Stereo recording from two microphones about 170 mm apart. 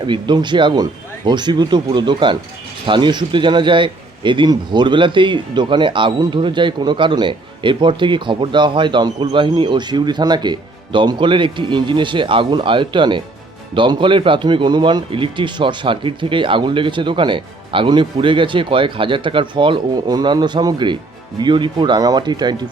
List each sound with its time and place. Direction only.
0.0 s a man's voice: 25° right (ahead or behind)